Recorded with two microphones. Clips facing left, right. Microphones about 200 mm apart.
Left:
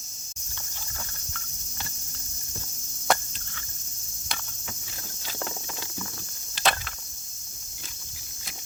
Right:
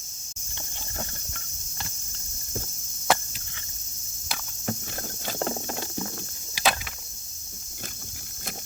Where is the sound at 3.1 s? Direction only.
5° right (ahead or behind).